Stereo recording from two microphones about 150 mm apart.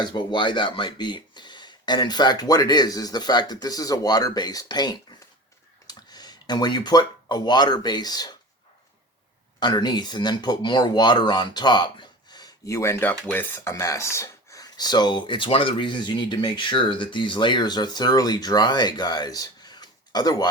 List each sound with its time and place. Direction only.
0.0 s speech: 30° left (ahead or behind)
9.6 s speech: 30° left (ahead or behind)